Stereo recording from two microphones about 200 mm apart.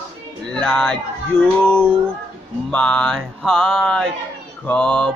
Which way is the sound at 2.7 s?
5° left (ahead or behind).